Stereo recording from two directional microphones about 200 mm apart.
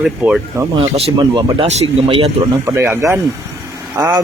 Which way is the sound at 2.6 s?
10° right (ahead or behind).